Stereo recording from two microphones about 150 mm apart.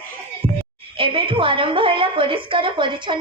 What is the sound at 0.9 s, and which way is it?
A woman's voice, 35° right (ahead or behind).